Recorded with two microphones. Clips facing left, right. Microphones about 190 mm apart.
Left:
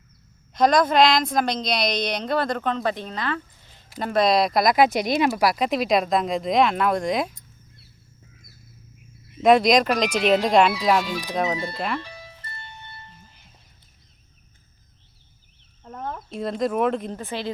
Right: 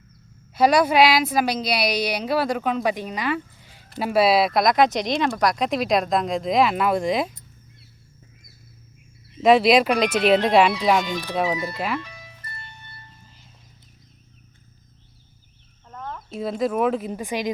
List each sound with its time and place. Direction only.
0.5 s a woman's voice: 10° right (ahead or behind)
9.4 s speech: centre (ahead or behind)
11.4 s speech: 30° left (ahead or behind)
11.9 s music: 30° left (ahead or behind)
16.3 s speech: centre (ahead or behind)